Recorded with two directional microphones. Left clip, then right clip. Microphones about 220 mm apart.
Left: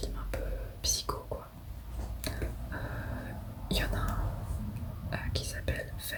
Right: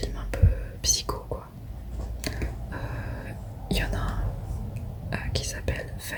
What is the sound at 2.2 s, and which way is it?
Computer keyboard, 10° right (ahead or behind).